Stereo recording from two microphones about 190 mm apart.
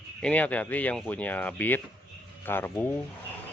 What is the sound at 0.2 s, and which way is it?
Speech, 5° left (ahead or behind).